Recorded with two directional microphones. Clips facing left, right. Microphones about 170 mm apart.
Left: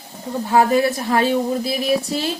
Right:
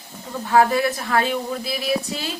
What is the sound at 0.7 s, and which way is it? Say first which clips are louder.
A woman's voice: left 3 dB; 35° left (ahead or behind).